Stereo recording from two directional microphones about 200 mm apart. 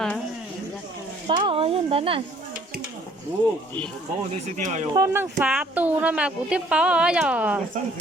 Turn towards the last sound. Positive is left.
turn(degrees=-5)  # may be behind; listen again after turning